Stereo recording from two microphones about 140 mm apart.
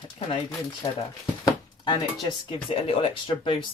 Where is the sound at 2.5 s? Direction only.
40° left (ahead or behind).